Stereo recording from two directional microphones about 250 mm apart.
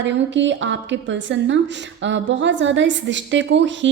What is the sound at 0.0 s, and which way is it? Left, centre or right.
A woman's voice, right.